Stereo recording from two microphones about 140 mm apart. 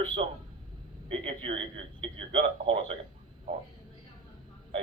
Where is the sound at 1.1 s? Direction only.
40° right (ahead or behind).